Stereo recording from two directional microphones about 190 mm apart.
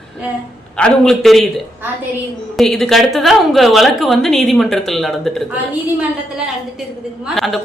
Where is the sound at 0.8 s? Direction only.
5° left (ahead or behind).